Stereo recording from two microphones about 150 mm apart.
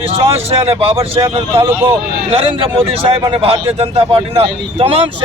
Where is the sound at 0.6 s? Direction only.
40° right (ahead or behind).